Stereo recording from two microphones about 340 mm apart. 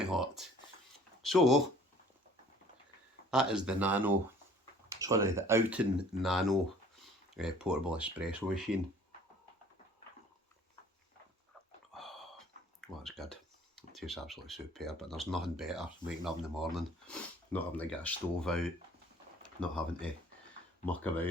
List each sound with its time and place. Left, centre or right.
0.0 s speech: centre
3.2 s speech: centre
11.9 s a sound: centre
13.0 s speech: centre